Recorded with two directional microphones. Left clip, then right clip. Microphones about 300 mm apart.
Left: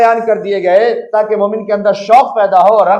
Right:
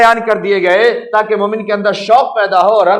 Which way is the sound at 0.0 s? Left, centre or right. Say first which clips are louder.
Even; right.